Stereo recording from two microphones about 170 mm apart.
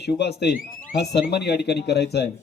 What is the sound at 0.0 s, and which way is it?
Speech, 75° left (ahead or behind).